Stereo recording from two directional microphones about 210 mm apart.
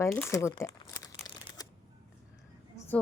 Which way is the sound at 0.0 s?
10° left (ahead or behind).